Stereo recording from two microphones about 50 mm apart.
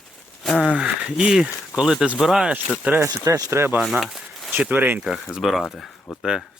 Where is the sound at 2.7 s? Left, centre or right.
Right.